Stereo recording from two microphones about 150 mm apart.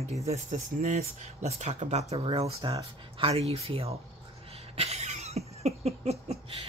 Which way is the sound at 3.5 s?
40° right (ahead or behind).